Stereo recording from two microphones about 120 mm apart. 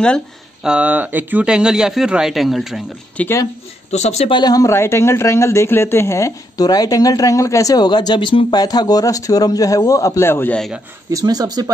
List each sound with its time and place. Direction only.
0.7 s speech: 10° right (ahead or behind)
3.2 s speech: 20° left (ahead or behind)
3.9 s speech: 65° left (ahead or behind)
4.3 s speech: 35° left (ahead or behind); by 10.6 s 15° left (ahead or behind)
11.1 s speech: 30° right (ahead or behind)